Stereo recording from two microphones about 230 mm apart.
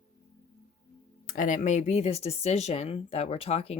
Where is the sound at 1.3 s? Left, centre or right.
Left.